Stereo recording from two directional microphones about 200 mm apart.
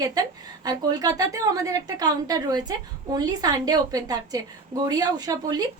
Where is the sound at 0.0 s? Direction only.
20° right (ahead or behind).